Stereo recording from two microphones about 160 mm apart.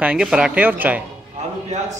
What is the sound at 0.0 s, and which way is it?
A man's voice, 5° right (ahead or behind).